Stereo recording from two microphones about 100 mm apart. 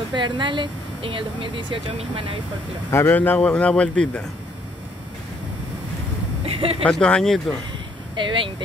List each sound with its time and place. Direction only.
0.1 s speech: 50° right (ahead or behind)
2.9 s a man's voice: 20° left (ahead or behind)
6.4 s vehicle: 75° right (ahead or behind)
6.9 s a man's voice: 10° left (ahead or behind)
8.2 s speech: 55° right (ahead or behind)